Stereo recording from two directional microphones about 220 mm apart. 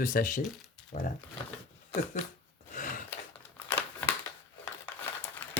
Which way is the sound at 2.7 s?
35° left (ahead or behind).